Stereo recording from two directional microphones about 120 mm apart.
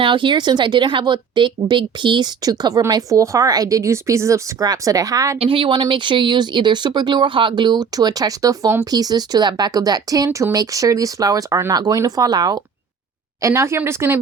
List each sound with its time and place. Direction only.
0.0 s speech: 45° right (ahead or behind); by 5.4 s 30° right (ahead or behind)
5.4 s speech: 45° right (ahead or behind)
13.4 s a woman's voice: 20° right (ahead or behind)